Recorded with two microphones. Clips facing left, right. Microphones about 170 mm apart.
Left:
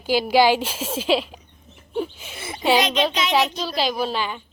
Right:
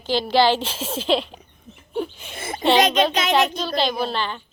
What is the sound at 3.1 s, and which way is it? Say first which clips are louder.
Child singing: right 2 dB; 50° right (ahead or behind).